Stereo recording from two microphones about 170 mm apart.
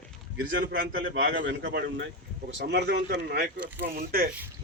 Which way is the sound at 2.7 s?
85° right.